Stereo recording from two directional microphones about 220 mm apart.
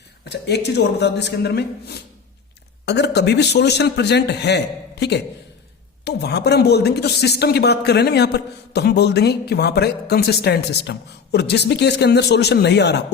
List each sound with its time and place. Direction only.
0.3 s speech: 50° left (ahead or behind)